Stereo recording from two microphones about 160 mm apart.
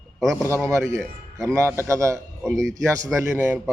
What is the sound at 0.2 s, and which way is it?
Speech, centre (ahead or behind).